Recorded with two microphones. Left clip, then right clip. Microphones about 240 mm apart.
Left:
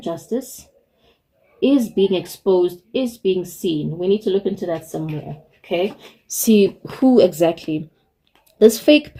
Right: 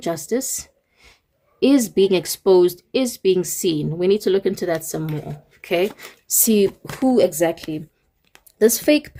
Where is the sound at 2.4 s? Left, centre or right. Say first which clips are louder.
Right 2 dB; right.